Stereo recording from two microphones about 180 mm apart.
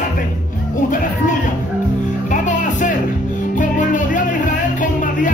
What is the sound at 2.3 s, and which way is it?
Music, 45° left (ahead or behind).